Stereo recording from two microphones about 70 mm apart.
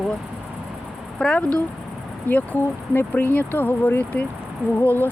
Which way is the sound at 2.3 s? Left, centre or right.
Left.